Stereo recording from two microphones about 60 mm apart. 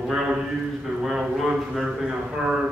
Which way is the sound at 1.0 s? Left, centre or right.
Centre.